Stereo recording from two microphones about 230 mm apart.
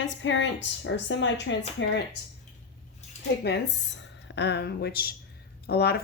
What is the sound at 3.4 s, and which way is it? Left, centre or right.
A woman's voice, left.